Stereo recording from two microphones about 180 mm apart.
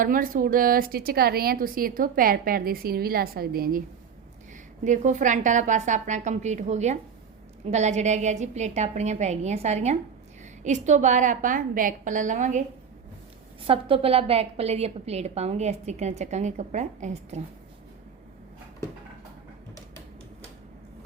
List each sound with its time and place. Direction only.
0.0 s a woman's voice: 50° right (ahead or behind)
13.7 s a woman's voice: 30° right (ahead or behind)